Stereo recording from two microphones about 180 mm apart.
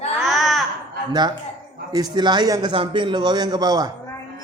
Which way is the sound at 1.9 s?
20° right (ahead or behind).